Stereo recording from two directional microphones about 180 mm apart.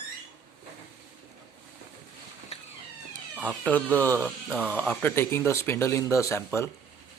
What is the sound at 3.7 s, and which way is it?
Speech, 10° left (ahead or behind).